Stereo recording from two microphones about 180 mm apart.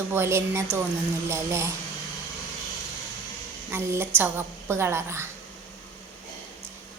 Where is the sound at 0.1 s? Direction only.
15° right (ahead or behind).